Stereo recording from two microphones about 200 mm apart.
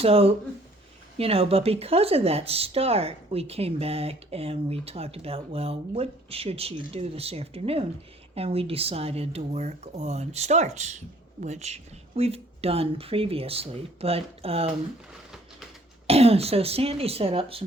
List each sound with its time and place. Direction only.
0.0 s speech: 30° right (ahead or behind)
16.0 s speech: 30° right (ahead or behind)